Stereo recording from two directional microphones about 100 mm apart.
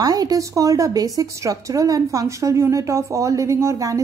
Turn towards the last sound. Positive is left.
turn(degrees=-30)  # may be behind; listen again after turning